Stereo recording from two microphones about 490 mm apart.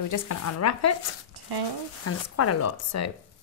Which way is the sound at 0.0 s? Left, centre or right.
Left.